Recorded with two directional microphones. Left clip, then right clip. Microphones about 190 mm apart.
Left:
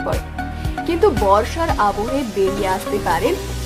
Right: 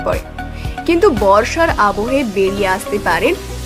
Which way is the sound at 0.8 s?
15° right (ahead or behind).